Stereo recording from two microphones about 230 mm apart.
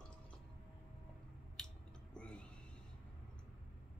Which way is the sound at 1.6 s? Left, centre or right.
Centre.